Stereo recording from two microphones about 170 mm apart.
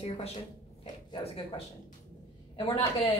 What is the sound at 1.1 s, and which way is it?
Speech, 30° left (ahead or behind).